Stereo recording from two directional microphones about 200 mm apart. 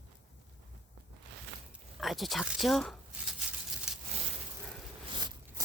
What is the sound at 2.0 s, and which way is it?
Speech, centre (ahead or behind).